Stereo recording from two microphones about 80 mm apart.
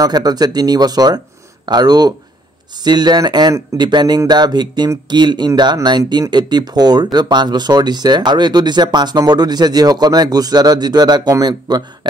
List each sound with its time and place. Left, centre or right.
0.0 s speech: right